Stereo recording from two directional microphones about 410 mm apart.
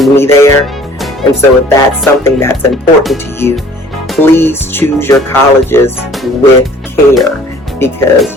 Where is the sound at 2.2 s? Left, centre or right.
Centre.